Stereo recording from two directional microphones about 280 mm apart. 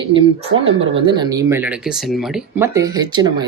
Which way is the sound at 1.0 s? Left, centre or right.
Centre.